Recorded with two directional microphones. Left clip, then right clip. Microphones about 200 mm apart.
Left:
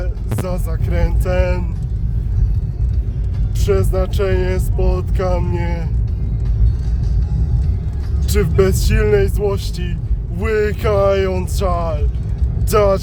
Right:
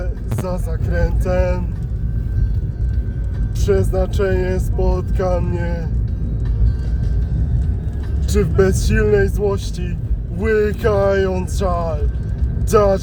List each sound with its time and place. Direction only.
0.4 s speech: 20° left (ahead or behind)
3.7 s speech: 15° left (ahead or behind)
8.3 s speech: 20° left (ahead or behind)